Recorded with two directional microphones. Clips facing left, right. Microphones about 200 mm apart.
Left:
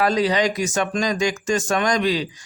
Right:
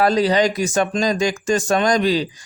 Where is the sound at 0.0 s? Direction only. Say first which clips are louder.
Right 3 dB; 35° right (ahead or behind).